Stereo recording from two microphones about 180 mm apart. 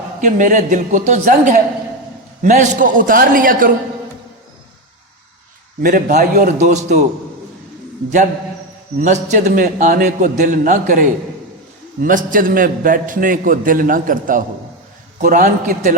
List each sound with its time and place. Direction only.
0.2 s a man's voice: 45° right (ahead or behind)
5.8 s a man's voice: 50° right (ahead or behind)
9.0 s a man's voice: 45° right (ahead or behind)